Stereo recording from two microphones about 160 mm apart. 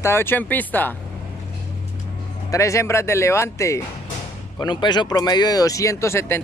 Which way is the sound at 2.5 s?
20° left (ahead or behind).